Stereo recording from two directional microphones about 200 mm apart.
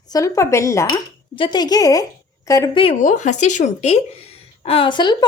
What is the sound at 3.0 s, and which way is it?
A woman's voice, 40° left (ahead or behind).